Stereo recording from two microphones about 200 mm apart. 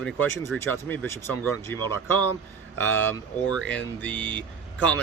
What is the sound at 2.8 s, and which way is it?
Speech, 10° left (ahead or behind).